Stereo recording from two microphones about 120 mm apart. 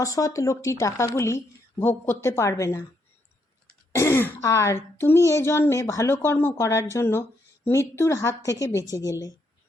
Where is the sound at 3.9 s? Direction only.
20° left (ahead or behind).